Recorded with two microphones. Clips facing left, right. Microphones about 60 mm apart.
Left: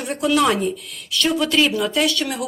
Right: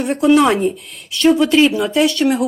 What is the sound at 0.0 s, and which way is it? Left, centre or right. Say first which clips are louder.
Speech: right 6 dB; right.